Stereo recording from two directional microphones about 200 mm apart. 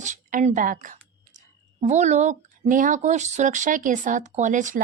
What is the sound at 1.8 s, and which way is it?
Speech, 35° right (ahead or behind).